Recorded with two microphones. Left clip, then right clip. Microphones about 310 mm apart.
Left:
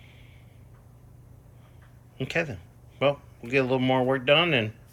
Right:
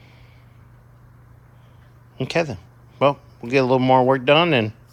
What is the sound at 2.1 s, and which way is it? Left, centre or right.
Speech, centre.